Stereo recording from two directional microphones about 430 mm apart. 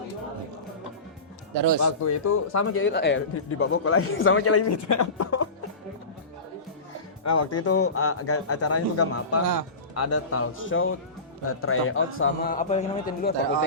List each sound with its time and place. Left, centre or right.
1.5 s speech: right
1.8 s a man's voice: left
7.3 s a man's voice: left